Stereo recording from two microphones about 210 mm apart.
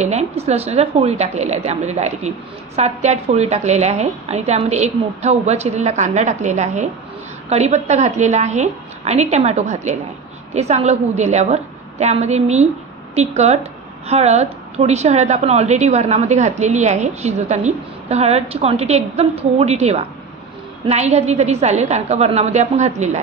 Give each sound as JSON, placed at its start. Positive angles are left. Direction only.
{"t": 0.0, "sound": "speech", "side_deg": -30}